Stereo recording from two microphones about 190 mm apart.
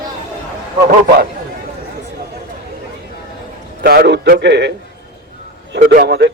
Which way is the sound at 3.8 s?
55° right (ahead or behind).